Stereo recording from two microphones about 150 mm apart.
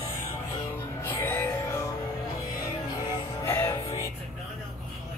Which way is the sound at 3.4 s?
15° left (ahead or behind).